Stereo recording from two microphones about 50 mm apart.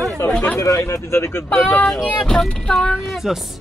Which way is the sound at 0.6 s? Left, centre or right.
Left.